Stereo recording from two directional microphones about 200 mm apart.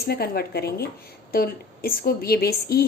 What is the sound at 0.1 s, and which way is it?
A woman's voice, 50° left (ahead or behind).